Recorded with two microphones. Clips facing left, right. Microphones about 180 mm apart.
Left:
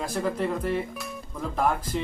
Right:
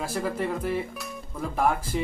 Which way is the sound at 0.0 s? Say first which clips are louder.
Left 1 dB; 5° right (ahead or behind).